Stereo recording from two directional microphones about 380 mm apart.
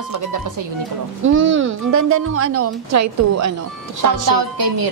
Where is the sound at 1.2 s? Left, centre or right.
Right.